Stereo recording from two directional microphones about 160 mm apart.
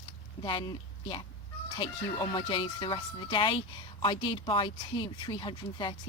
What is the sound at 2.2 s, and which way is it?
Speech, 30° left (ahead or behind).